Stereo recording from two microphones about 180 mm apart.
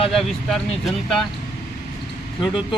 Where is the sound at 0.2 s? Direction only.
Centre (ahead or behind).